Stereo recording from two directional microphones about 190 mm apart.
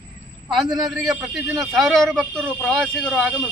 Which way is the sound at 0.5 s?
Centre (ahead or behind).